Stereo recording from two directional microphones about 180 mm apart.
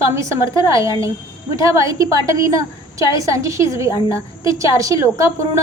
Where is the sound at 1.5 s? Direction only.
15° right (ahead or behind).